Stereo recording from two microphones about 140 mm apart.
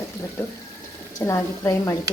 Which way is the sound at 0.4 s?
15° left (ahead or behind).